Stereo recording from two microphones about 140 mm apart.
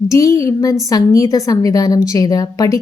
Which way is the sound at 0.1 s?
20° left (ahead or behind).